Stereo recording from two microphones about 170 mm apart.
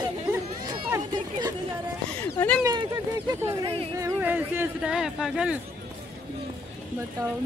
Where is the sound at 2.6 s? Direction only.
25° right (ahead or behind).